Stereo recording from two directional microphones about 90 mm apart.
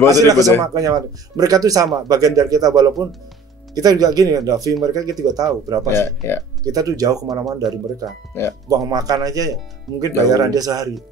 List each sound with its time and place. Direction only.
0.1 s speech: 45° right (ahead or behind)
5.9 s speech: 30° left (ahead or behind)
6.6 s speech: 40° right (ahead or behind)
8.6 s speech: 45° right (ahead or behind)